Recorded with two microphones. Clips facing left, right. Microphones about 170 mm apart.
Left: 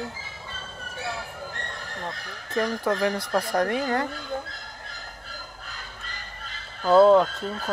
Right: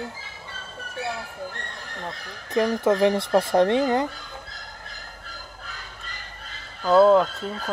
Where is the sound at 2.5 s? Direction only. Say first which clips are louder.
Right 4 dB; 20° right (ahead or behind).